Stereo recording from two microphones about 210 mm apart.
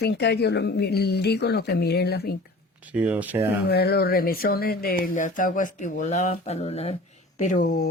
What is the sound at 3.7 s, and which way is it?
Speech, 50° left (ahead or behind).